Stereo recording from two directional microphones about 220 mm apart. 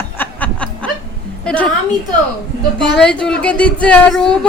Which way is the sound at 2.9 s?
5° left (ahead or behind).